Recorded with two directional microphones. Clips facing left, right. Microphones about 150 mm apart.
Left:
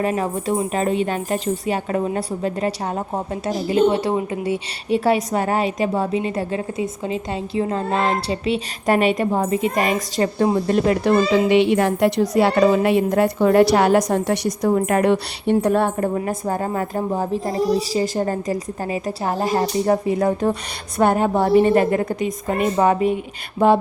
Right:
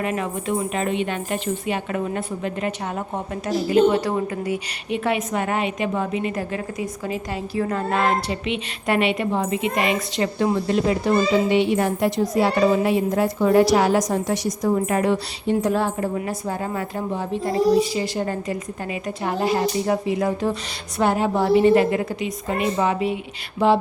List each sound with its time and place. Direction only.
0.0 s a woman's voice: 35° left (ahead or behind)
11.0 s a woman's voice: 85° left; by 23.8 s 50° left (ahead or behind)